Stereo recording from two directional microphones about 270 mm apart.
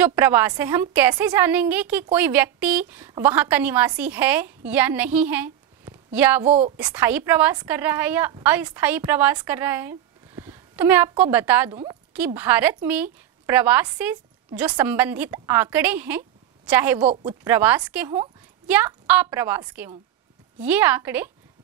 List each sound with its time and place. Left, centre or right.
0.0 s a woman's voice: centre
6.4 s a woman's voice: right
6.8 s a woman's voice: centre